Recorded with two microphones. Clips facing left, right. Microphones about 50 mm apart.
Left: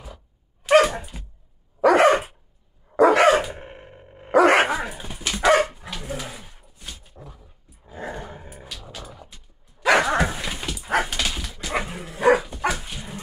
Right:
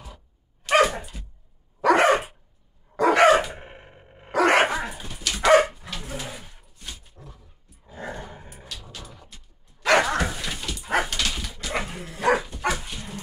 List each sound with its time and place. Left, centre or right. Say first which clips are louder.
0.7 s dog: left 3 dB; centre
3.0 s bark: left 1 dB; centre
5.4 s dog: right 1 dB; centre
5.8 s pigeon: left 2 dB; centre
6.9 s dog: left 1 dB; centre
10.1 s dog: left 3 dB; left
10.9 s dog: left 1 dB; centre